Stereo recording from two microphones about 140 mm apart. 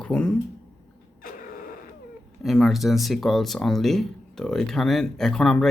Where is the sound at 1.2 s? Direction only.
80° left.